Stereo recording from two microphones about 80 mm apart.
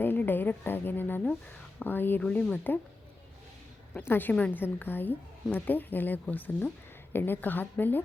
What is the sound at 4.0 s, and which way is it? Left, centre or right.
A woman's voice, left.